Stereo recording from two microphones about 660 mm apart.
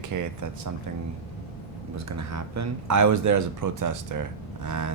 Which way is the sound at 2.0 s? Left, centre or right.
Right.